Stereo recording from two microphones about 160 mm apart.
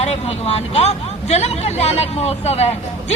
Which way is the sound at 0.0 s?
40° left (ahead or behind).